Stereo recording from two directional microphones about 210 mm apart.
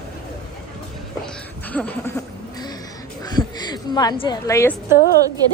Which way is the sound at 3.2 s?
20° left (ahead or behind).